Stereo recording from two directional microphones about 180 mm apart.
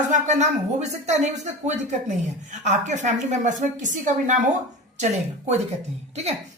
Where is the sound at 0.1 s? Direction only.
40° right (ahead or behind).